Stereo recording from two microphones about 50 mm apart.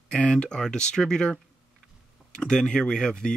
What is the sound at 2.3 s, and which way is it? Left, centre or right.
Speech, centre.